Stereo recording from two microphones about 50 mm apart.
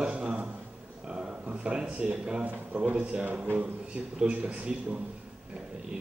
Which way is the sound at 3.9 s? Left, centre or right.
Right.